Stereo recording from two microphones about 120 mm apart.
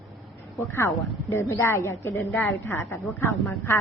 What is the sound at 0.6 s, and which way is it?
A woman's voice, 25° left (ahead or behind).